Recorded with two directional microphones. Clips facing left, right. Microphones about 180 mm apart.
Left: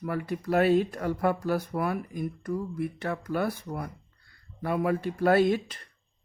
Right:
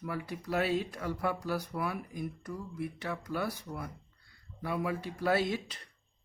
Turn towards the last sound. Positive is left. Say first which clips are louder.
# left 8 dB
turn(degrees=55)  # may be behind; listen again after turning